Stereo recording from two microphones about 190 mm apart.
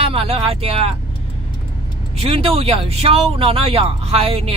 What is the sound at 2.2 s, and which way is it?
Speech, 30° right (ahead or behind).